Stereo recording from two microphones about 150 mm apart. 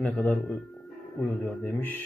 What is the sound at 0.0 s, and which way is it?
Speech, 10° left (ahead or behind).